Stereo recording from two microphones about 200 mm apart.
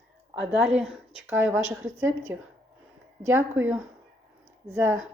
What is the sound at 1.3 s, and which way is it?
Speech, 75° right (ahead or behind).